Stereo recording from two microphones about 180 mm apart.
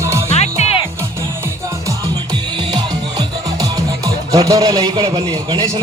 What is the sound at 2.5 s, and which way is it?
Music, 25° right (ahead or behind).